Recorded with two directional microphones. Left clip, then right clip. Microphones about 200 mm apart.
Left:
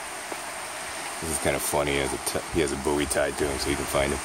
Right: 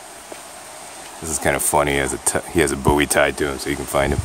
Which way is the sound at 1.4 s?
35° right (ahead or behind).